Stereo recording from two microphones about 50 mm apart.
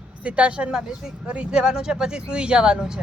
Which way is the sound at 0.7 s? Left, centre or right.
Centre.